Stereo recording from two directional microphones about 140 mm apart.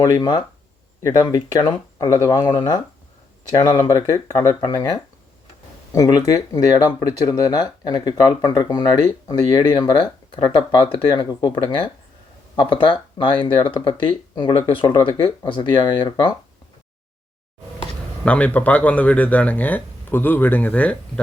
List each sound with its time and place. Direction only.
0.0 s speech: 25° left (ahead or behind)
18.3 s speech: 10° left (ahead or behind)